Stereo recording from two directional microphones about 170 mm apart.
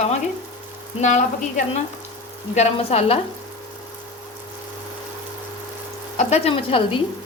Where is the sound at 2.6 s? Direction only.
35° left (ahead or behind).